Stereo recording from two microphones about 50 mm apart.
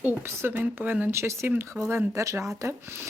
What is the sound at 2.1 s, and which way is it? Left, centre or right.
Speech, right.